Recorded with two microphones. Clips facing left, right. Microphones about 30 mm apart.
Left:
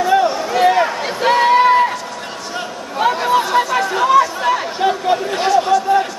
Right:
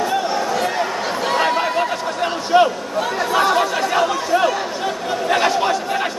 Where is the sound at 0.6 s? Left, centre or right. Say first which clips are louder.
Left 7 dB; left.